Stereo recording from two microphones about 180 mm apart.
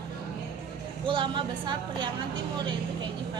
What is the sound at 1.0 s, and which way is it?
A woman's voice, 25° right (ahead or behind).